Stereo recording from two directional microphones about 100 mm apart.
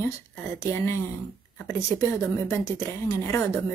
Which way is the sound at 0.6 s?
25° left (ahead or behind).